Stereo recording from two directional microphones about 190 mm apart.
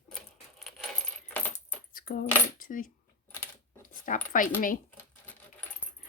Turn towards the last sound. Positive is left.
turn(degrees=10)  # may be behind; listen again after turning